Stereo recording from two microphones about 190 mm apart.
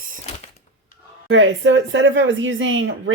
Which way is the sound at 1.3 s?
80° right.